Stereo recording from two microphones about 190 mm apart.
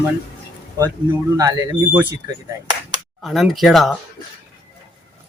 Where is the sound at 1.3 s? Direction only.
20° right (ahead or behind).